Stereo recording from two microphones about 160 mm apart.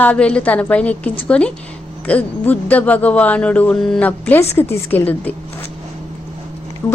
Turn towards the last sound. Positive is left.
turn(degrees=20)  # may be behind; listen again after turning